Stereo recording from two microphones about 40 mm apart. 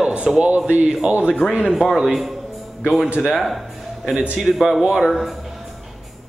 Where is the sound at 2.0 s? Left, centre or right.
Centre.